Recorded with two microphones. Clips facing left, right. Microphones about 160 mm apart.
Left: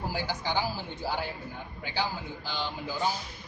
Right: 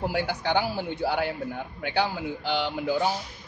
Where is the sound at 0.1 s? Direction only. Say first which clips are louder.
Right 5 dB; 65° right (ahead or behind).